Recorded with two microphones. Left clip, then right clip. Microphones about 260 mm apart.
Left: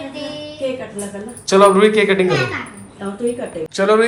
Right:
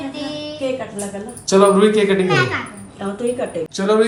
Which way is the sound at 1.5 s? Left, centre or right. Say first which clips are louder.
Left 2 dB; centre.